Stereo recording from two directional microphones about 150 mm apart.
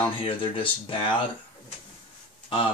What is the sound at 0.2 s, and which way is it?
Speech, 35° left (ahead or behind).